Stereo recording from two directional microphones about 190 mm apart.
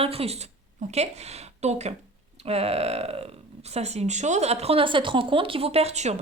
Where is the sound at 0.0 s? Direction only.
30° right (ahead or behind).